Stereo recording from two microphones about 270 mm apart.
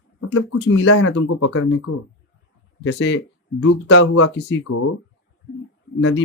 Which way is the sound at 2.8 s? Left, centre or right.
Left.